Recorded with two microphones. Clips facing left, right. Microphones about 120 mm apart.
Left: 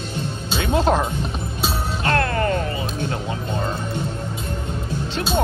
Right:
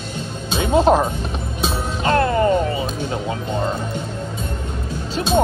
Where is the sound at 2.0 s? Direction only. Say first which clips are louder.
Right 5 dB; 20° right (ahead or behind).